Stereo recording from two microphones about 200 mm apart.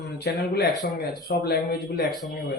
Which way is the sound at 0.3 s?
50° left (ahead or behind).